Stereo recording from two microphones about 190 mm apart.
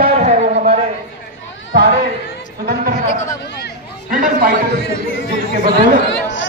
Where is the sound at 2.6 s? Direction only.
50° right (ahead or behind).